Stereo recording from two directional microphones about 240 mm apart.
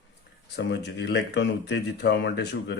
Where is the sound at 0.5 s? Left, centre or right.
Left.